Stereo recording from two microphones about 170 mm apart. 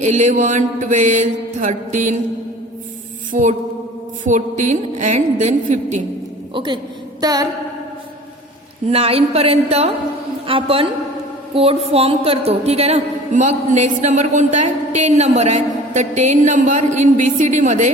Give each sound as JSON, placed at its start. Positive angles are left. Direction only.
{"t": 0.0, "sound": "a woman's voice", "side_deg": -45}
{"t": 3.3, "sound": "a woman's voice", "side_deg": -45}
{"t": 7.2, "sound": "a sound", "side_deg": -20}
{"t": 8.9, "sound": "a woman's voice", "side_deg": -35}